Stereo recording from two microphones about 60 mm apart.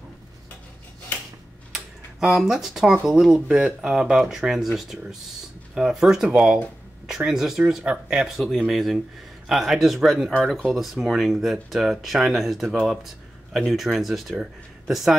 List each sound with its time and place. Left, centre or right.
1.7 s computer keyboard: centre
3.1 s speech: centre
12.8 s a sound: centre
13.7 s speech: centre